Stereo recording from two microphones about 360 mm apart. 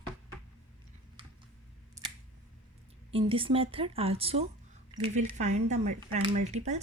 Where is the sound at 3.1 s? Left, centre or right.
Centre.